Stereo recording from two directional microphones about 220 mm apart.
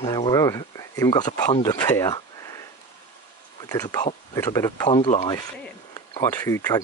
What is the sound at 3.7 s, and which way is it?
Speech, 15° left (ahead or behind).